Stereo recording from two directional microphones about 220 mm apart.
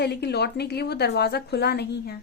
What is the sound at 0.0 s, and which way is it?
Speech, 50° left (ahead or behind).